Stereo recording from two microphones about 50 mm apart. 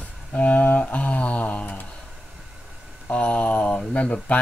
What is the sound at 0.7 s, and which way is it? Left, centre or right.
Music, left.